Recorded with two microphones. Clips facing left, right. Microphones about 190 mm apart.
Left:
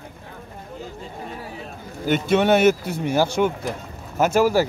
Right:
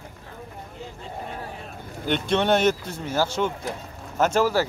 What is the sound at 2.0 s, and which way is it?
Speech, 5° left (ahead or behind).